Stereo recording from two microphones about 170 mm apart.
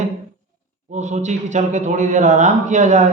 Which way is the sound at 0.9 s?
45° right (ahead or behind).